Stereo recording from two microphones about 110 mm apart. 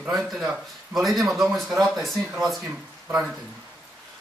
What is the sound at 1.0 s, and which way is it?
Speech, centre (ahead or behind).